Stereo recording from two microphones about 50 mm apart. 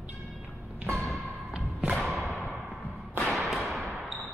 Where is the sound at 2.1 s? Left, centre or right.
Centre.